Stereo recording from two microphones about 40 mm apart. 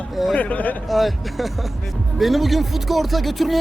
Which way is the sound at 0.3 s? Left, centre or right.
Left.